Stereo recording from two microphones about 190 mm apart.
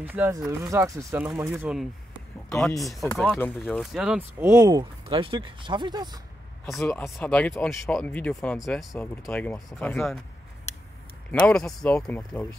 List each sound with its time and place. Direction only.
0.0 s speech: 10° right (ahead or behind)
1.5 s speech: 5° right (ahead or behind); by 6.2 s 20° right (ahead or behind)
6.7 s speech: 5° left (ahead or behind)
11.3 s speech: 5° left (ahead or behind)